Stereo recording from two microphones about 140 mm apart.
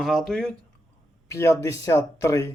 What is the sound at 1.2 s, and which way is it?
Speech, 20° left (ahead or behind).